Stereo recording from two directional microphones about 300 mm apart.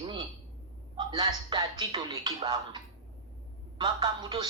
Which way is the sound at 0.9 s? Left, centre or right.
Centre.